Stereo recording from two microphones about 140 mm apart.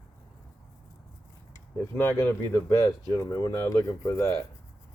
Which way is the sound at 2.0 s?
15° left (ahead or behind).